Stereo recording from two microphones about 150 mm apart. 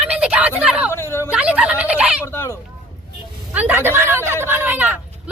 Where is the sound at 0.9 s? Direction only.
15° left (ahead or behind).